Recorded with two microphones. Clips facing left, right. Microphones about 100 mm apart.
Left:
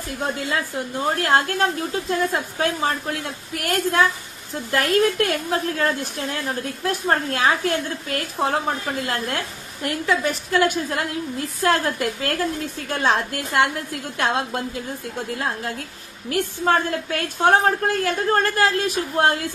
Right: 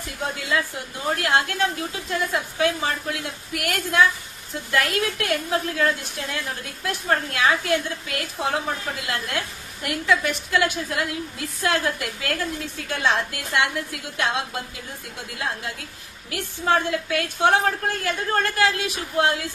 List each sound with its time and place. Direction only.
1.1 s a woman's voice: 40° left (ahead or behind)